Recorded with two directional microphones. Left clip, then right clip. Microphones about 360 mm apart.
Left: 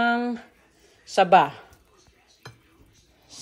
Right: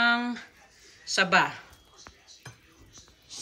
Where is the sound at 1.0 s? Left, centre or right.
Centre.